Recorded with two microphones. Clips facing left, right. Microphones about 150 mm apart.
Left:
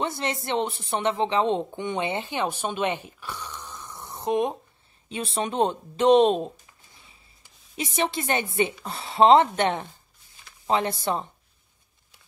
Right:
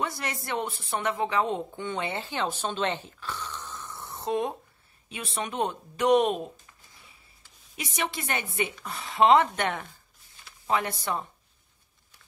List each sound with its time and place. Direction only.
0.0 s a woman's voice: 25° left (ahead or behind)
5.1 s a woman's voice: 30° left (ahead or behind)
7.7 s a woman's voice: 30° left (ahead or behind)